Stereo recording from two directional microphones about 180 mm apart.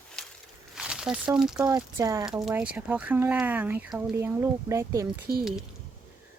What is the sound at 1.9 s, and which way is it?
Speech, 15° right (ahead or behind).